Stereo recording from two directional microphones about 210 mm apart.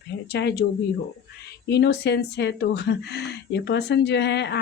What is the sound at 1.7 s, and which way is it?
Speech, 55° left (ahead or behind).